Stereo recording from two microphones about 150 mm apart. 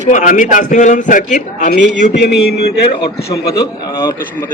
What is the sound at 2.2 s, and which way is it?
A man's voice, 90° left.